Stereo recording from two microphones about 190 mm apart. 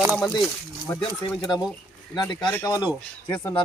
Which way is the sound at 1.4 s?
20° left (ahead or behind).